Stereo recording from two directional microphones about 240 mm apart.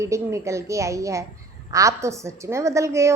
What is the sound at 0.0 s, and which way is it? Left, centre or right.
A woman's voice, centre.